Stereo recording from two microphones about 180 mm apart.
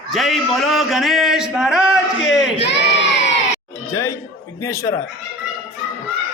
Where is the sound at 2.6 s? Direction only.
80° left.